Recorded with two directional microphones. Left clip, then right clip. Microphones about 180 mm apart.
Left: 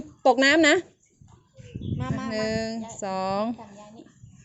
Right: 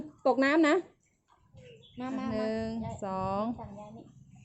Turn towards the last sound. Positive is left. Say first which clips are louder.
# left 6 dB
turn(degrees=20)  # may be behind; listen again after turning